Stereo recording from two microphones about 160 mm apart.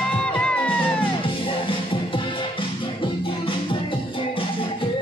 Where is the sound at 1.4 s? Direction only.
30° left (ahead or behind).